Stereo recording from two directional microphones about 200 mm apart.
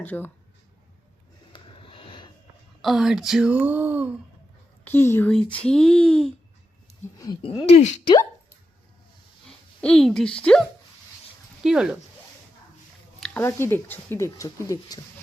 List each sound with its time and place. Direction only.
0.0 s speech: 10° left (ahead or behind)
1.5 s a sound: 25° left (ahead or behind)
2.8 s a child's voice: centre (ahead or behind)
4.9 s a child's voice: 10° left (ahead or behind)
7.2 s speech: 20° left (ahead or behind)
9.5 s a woman's voice: 5° left (ahead or behind)
11.6 s a child's voice: 5° right (ahead or behind)
13.1 s a sound: 5° left (ahead or behind)
13.4 s speech: 10° left (ahead or behind)